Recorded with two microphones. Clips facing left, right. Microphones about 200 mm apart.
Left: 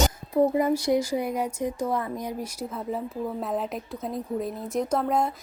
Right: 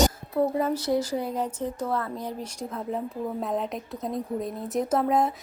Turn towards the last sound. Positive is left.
turn(degrees=0)  # may be behind; listen again after turning